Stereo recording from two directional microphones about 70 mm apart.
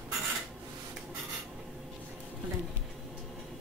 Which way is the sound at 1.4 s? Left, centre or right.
Centre.